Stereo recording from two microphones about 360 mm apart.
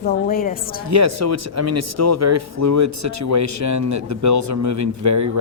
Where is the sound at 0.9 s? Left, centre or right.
Right.